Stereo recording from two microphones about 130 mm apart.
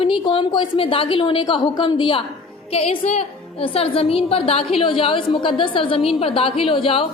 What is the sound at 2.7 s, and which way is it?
A woman's voice, 50° left (ahead or behind).